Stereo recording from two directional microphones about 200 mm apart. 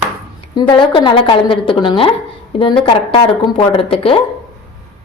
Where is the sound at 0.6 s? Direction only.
25° left (ahead or behind).